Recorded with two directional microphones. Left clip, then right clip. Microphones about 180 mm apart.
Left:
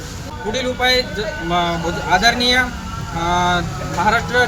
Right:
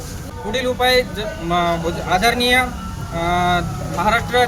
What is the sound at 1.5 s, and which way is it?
Speech, 10° right (ahead or behind).